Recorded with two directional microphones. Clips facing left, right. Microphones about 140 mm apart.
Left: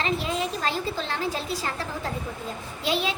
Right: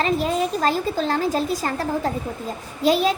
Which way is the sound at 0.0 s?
45° right (ahead or behind).